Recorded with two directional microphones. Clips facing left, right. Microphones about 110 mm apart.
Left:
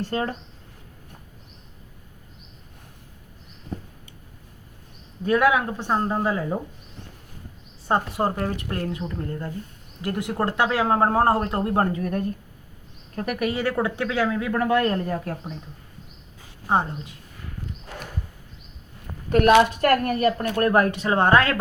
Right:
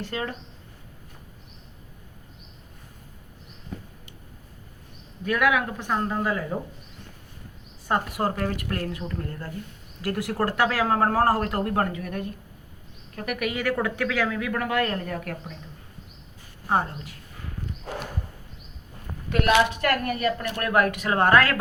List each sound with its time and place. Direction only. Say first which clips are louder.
0.0 s a woman's voice: left 5 dB; 40° left (ahead or behind)
5.2 s speech: left 3 dB; 30° left (ahead or behind)
7.9 s speech: left 2 dB; 25° left (ahead or behind)
16.6 s speech: left 2 dB; 25° left (ahead or behind)
19.3 s a woman's voice: left 5 dB; 40° left (ahead or behind); by 21.6 s 25° left (ahead or behind)